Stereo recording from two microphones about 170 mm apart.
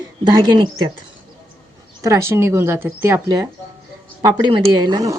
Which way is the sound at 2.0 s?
15° right (ahead or behind).